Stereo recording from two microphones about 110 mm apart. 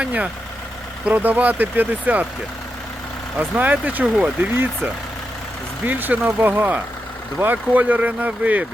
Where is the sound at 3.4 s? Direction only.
15° right (ahead or behind).